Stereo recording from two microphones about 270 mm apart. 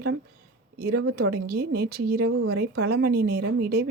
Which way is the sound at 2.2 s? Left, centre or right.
Right.